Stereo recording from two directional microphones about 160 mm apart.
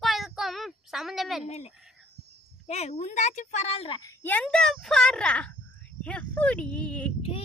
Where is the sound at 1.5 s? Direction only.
40° left (ahead or behind).